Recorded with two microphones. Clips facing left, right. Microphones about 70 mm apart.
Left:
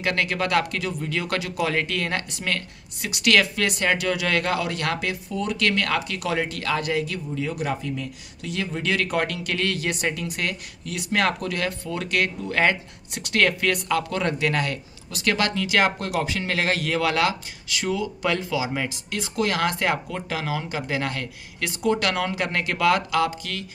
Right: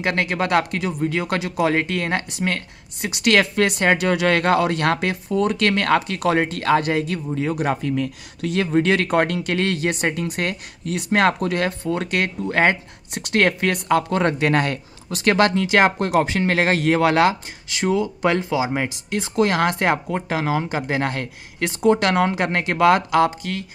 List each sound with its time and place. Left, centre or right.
0.0 s speech: right